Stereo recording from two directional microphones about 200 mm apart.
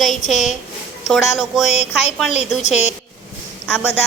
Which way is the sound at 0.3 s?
Centre (ahead or behind).